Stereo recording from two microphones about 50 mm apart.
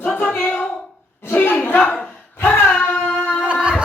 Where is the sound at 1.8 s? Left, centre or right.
Left.